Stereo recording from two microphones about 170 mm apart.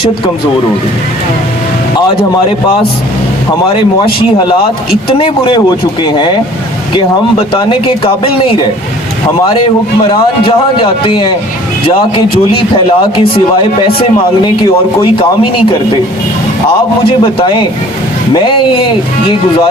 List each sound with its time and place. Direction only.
5.0 s speech: 30° left (ahead or behind)
6.9 s speech: 30° left (ahead or behind)
11.0 s speech: 30° left (ahead or behind)
12.5 s speech: 30° left (ahead or behind)
17.0 s speech: 30° left (ahead or behind)